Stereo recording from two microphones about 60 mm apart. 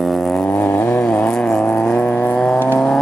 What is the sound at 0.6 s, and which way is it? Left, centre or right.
Vehicle, left.